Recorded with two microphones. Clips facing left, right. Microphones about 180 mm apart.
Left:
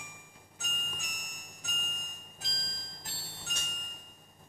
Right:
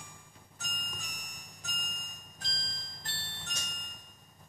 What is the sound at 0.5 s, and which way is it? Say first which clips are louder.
Music: left 1 dB; 10° left (ahead or behind).